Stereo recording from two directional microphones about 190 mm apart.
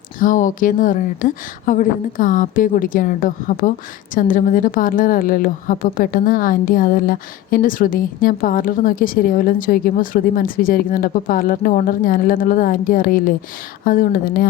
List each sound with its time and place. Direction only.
0.2 s a woman's voice: 40° left (ahead or behind)